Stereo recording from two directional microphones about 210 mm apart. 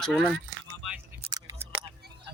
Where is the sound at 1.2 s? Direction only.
20° right (ahead or behind).